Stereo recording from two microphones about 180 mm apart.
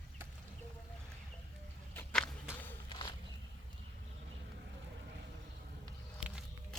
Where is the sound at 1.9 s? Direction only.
10° left (ahead or behind).